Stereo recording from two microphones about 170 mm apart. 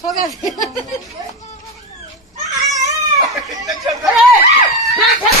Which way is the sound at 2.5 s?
20° right (ahead or behind).